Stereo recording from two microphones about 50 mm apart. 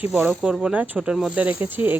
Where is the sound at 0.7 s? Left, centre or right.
Right.